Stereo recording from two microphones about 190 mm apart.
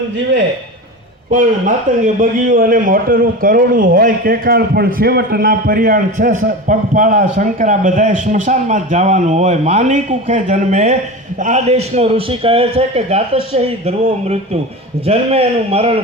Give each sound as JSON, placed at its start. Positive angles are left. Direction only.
{"t": 1.3, "sound": "a man's voice", "side_deg": -45}